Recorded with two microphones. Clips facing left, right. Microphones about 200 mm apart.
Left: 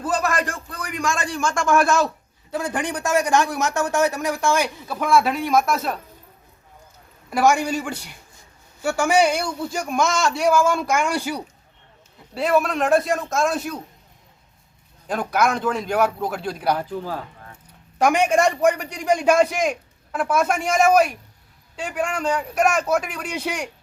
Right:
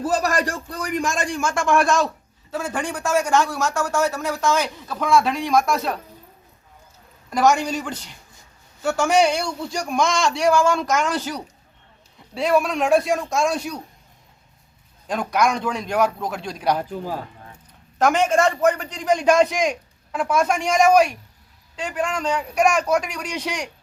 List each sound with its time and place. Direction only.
0.4 s speech: 40° right (ahead or behind)
1.0 s speech: 15° right (ahead or behind); by 2.0 s 5° left (ahead or behind)
2.5 s speech: 15° left (ahead or behind)
7.3 s speech: 5° left (ahead or behind)
15.0 s speech: 5° left (ahead or behind)
16.7 s speech: 15° right (ahead or behind)
18.0 s speech: 15° left (ahead or behind)